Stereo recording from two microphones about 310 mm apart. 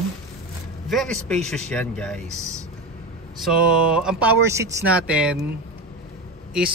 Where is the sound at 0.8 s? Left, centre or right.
Centre.